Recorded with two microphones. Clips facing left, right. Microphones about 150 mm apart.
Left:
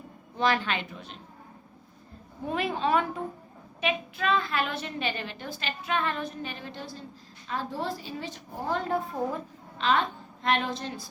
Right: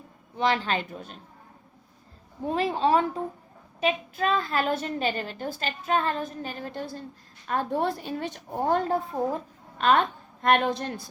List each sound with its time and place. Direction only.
0.3 s a woman's voice: 20° right (ahead or behind)
0.6 s a woman's voice: 40° right (ahead or behind)
2.5 s a woman's voice: 35° right (ahead or behind); by 8.8 s 55° right (ahead or behind)
9.1 s a child's voice: 25° right (ahead or behind)
9.7 s a woman's voice: 50° right (ahead or behind)